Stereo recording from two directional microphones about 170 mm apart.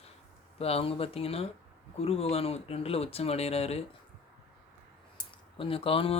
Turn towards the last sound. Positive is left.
turn(degrees=35)  # may be behind; listen again after turning